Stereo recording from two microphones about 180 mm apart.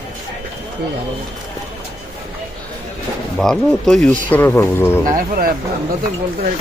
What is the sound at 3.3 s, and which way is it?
Speech, 5° left (ahead or behind).